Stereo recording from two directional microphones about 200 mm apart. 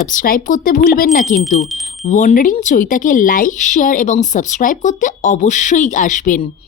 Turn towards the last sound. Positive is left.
turn(degrees=40)  # may be behind; listen again after turning